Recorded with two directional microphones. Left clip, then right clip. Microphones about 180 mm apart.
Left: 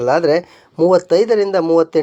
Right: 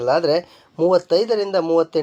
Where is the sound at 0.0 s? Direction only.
35° left (ahead or behind).